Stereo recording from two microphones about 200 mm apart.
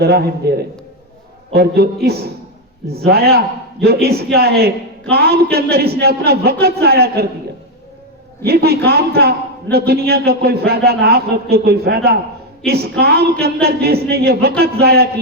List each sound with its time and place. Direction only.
0.0 s a man's voice: 50° right (ahead or behind)
1.5 s a man's voice: 50° right (ahead or behind)
8.4 s a man's voice: 50° right (ahead or behind)